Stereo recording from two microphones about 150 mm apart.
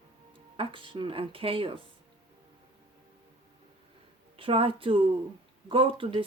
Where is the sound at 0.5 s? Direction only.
35° right (ahead or behind).